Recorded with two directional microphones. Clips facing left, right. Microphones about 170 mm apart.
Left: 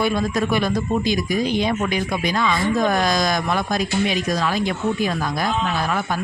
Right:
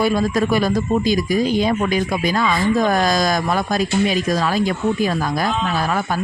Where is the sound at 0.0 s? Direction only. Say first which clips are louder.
Right 3 dB; 40° right (ahead or behind).